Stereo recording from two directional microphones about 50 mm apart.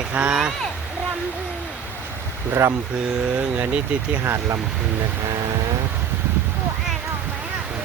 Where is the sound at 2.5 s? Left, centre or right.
Right.